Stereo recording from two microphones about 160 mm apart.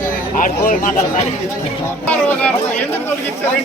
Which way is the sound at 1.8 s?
10° left (ahead or behind).